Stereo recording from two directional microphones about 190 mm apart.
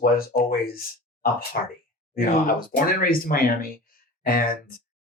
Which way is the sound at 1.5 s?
45° left (ahead or behind).